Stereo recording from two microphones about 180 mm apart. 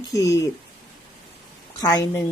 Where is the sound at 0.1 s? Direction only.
20° left (ahead or behind).